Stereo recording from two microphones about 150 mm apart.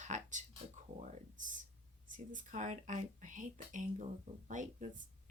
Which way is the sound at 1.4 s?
60° right (ahead or behind).